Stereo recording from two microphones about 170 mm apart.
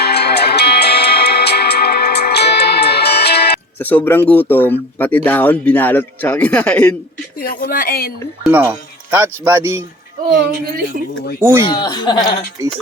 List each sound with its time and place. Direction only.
0.0 s music: 75° left (ahead or behind)
3.8 s speech: 10° left (ahead or behind)
7.4 s speech: 55° left (ahead or behind)
8.4 s speech: 10° right (ahead or behind)
11.3 s speech: 15° right (ahead or behind)
11.7 s speech: 25° left (ahead or behind)